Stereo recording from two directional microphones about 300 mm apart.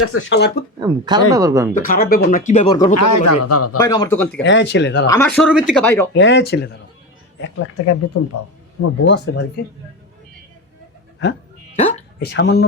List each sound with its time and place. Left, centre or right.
0.0 s speech: left
0.8 s speech: centre
1.7 s speech: left
2.9 s a man's voice: left
3.8 s speech: centre
4.4 s speech: left
5.0 s speech: centre
6.1 s speech: left
11.8 s hiccup: left
12.2 s speech: left